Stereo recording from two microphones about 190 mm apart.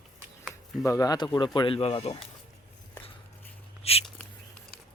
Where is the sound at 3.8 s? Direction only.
30° left (ahead or behind).